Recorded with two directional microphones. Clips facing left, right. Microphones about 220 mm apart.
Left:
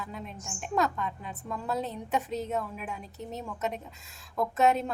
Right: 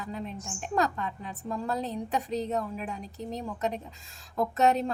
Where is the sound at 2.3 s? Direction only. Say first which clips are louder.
Right 2 dB; 5° left (ahead or behind).